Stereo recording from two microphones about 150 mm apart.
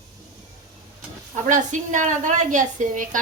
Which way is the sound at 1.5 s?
55° right (ahead or behind).